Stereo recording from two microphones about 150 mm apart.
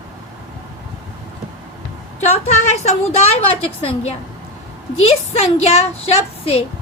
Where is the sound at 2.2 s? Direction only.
50° left (ahead or behind).